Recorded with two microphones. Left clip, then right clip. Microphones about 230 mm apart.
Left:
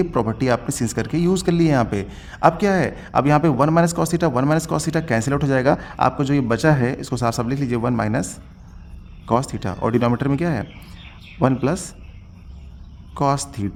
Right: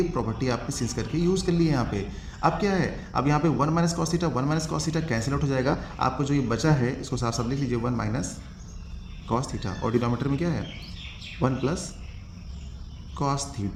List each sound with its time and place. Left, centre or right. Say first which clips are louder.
0.1 s a man's voice: left 8 dB; left
13.1 s a man's voice: left 8 dB; left